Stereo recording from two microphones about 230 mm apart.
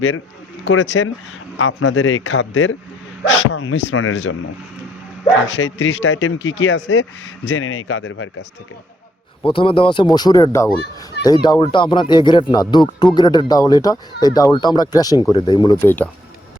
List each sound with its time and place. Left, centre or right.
0.6 s speech: left
5.5 s speech: left
9.5 s speech: left